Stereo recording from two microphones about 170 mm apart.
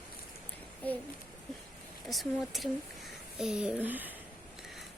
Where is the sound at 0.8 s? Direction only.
10° left (ahead or behind).